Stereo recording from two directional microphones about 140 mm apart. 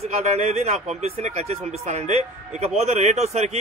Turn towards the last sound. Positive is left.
turn(degrees=-55)  # may be behind; listen again after turning